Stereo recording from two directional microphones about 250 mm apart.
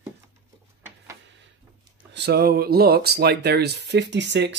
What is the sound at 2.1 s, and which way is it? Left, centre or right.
Speech, right.